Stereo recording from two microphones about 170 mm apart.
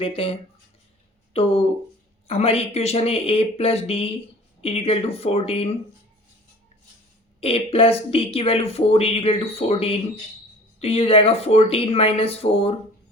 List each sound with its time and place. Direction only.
0.0 s speech: 30° left (ahead or behind)
7.4 s speech: 35° left (ahead or behind)